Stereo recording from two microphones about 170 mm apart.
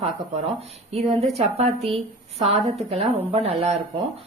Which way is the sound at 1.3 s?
40° right (ahead or behind).